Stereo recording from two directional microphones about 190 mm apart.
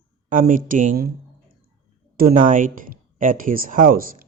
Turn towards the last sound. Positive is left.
turn(degrees=-50)  # may be behind; listen again after turning